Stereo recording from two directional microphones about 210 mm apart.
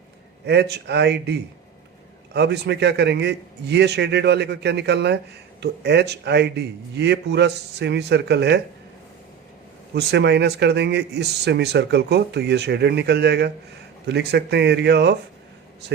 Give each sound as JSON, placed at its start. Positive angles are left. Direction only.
{"t": 0.4, "sound": "a man's voice", "side_deg": -50}
{"t": 9.9, "sound": "a man's voice", "side_deg": -55}